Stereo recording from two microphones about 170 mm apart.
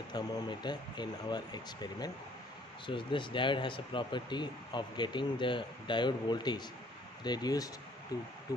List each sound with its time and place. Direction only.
0.1 s speech: 25° left (ahead or behind)